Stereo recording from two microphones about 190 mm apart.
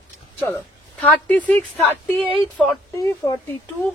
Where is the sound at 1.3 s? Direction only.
10° left (ahead or behind).